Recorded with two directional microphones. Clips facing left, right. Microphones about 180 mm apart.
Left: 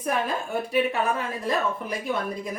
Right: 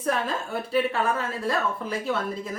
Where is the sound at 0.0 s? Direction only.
15° left (ahead or behind).